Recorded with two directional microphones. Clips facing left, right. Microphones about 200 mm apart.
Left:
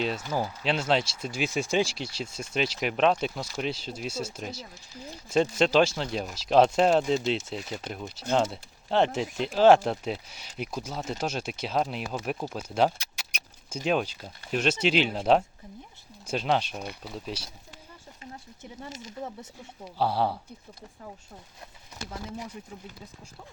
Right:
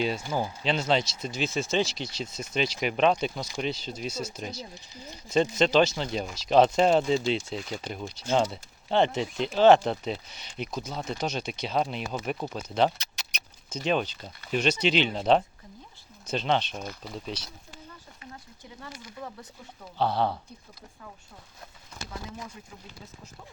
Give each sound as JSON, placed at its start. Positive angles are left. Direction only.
{"t": 0.6, "sound": "speech", "side_deg": 5}
{"t": 18.2, "sound": "speech", "side_deg": 25}
{"t": 20.0, "sound": "speech", "side_deg": 5}